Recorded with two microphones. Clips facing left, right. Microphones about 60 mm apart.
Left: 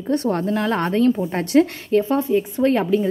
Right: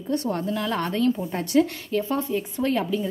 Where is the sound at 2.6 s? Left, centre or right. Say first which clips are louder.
Left 5 dB; left.